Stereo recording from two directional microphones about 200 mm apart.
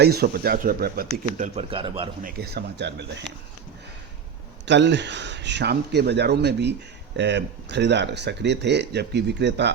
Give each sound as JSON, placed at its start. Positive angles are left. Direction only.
{"t": 0.0, "sound": "speech", "side_deg": -50}
{"t": 1.5, "sound": "a man's voice", "side_deg": -25}
{"t": 2.2, "sound": "speech", "side_deg": -50}
{"t": 4.6, "sound": "speech", "side_deg": -60}